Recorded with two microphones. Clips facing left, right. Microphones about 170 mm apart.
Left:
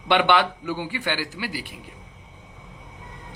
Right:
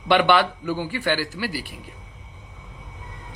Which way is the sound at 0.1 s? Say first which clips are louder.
Right 2 dB; 20° left (ahead or behind).